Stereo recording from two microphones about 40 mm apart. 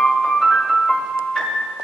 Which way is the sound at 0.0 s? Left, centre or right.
Centre.